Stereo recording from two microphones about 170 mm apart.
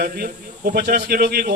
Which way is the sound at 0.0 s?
60° right (ahead or behind).